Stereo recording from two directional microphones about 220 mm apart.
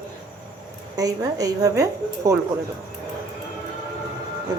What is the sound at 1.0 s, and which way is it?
Speech, 15° right (ahead or behind).